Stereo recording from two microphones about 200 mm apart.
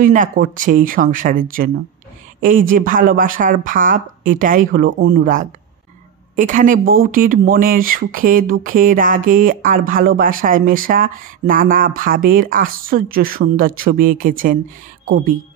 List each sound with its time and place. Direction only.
0.0 s speech: 40° right (ahead or behind)